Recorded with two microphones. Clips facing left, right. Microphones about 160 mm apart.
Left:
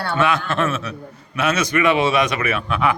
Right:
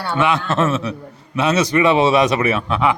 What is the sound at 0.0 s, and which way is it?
A man's voice, 20° right (ahead or behind).